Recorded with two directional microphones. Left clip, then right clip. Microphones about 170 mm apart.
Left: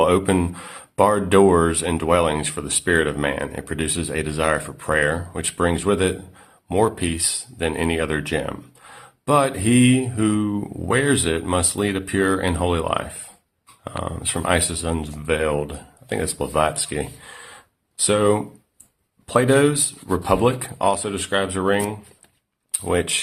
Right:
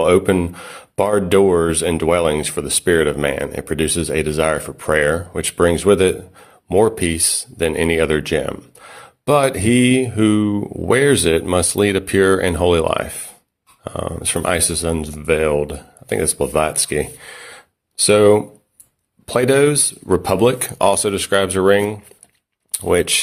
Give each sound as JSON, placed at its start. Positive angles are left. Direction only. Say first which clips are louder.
{"t": 0.0, "sound": "speech", "louder": "right 4 dB", "side_deg": -25}
{"t": 22.9, "sound": "speech", "louder": "right 6 dB", "side_deg": -35}